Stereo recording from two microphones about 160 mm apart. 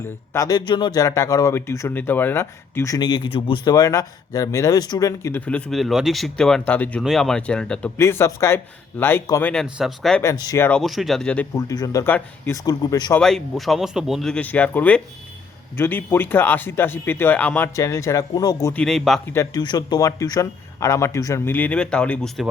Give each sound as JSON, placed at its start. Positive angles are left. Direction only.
{"t": 0.3, "sound": "a man's voice", "side_deg": 25}
{"t": 5.5, "sound": "speech", "side_deg": 5}
{"t": 7.9, "sound": "speech", "side_deg": 15}
{"t": 9.6, "sound": "speech", "side_deg": -5}
{"t": 10.2, "sound": "a man's voice", "side_deg": 25}
{"t": 10.7, "sound": "speech", "side_deg": 0}
{"t": 11.5, "sound": "a man's voice", "side_deg": 20}
{"t": 12.6, "sound": "a man's voice", "side_deg": 25}
{"t": 13.1, "sound": "speech", "side_deg": 5}
{"t": 18.7, "sound": "speech", "side_deg": 5}
{"t": 19.3, "sound": "speech", "side_deg": 15}